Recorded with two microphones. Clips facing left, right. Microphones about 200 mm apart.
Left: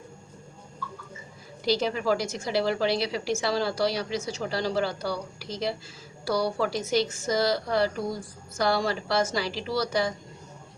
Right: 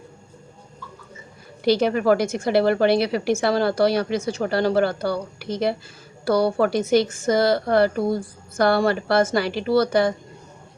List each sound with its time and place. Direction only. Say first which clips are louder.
1.6 s a woman's voice: right 7 dB; 60° right (ahead or behind)